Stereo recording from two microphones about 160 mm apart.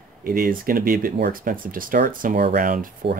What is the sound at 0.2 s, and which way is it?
Speech, 60° right (ahead or behind).